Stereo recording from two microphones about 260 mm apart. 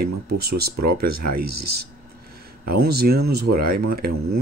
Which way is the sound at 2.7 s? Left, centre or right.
Right.